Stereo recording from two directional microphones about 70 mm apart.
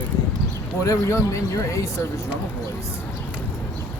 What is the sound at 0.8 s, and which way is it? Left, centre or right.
Speech, left.